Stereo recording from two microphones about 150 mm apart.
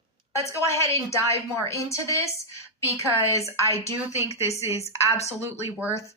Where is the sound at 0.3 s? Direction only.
20° left (ahead or behind).